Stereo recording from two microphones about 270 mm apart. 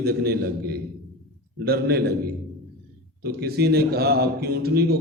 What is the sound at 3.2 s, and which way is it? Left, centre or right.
A man's voice, right.